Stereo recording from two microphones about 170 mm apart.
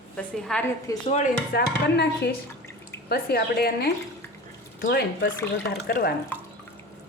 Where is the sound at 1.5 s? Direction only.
75° left (ahead or behind).